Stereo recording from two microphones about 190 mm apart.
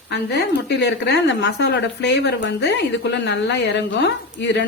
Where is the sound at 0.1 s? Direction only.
65° left (ahead or behind).